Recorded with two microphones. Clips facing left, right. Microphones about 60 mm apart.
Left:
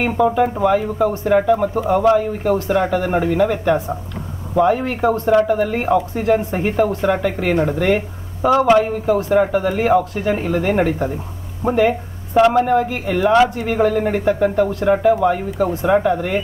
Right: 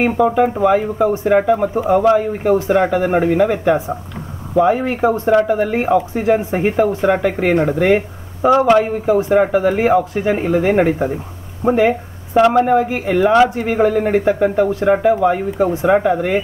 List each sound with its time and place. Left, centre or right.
0.0 s speech: centre